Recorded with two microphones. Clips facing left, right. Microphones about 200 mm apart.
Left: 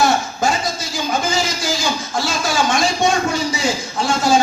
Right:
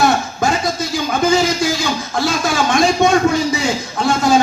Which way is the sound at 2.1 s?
55° right (ahead or behind).